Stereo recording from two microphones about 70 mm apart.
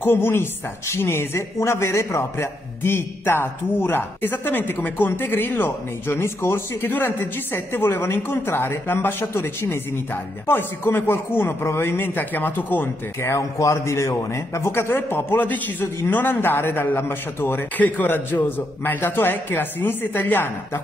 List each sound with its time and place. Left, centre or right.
0.0 s a man's voice: left
13.2 s a man's voice: left